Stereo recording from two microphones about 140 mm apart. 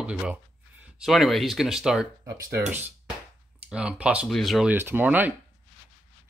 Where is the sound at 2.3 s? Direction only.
20° right (ahead or behind).